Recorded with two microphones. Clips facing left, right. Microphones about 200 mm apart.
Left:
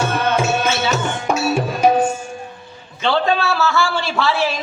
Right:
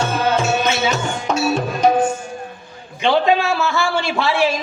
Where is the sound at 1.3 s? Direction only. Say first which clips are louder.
Even; 10° left (ahead or behind).